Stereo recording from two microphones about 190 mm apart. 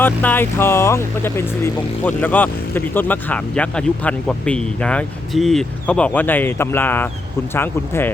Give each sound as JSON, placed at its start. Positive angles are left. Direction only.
{"t": 0.0, "sound": "speech", "side_deg": 10}